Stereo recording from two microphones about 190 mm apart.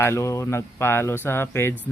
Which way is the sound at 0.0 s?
15° left (ahead or behind).